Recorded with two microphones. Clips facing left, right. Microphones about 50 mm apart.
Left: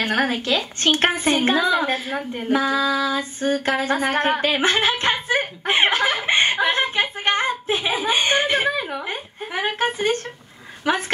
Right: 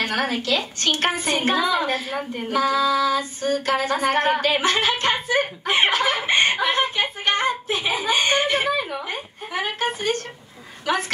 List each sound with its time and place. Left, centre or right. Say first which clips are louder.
0.0 s female singing: left 2 dB; left
5.7 s a woman's voice: left 2 dB; left